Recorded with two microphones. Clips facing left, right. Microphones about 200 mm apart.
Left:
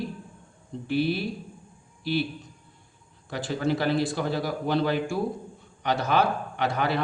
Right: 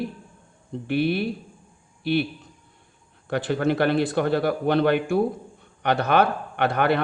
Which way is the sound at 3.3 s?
60° right (ahead or behind).